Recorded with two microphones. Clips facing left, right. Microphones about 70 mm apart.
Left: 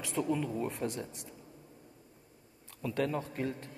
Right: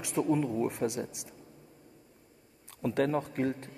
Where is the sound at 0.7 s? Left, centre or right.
Right.